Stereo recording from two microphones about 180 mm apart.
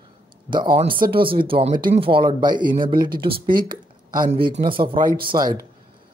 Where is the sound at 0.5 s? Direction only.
25° right (ahead or behind).